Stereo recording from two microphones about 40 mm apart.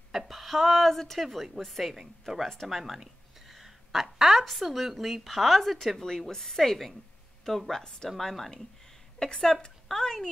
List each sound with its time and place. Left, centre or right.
0.1 s a woman's voice: centre
1.2 s a woman's voice: centre
2.7 s a sound: centre
4.4 s a woman's voice: centre
9.2 s a woman's voice: left